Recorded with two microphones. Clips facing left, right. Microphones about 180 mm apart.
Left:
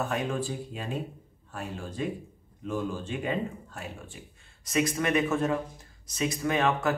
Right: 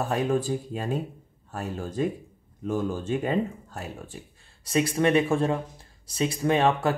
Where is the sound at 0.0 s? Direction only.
40° right (ahead or behind).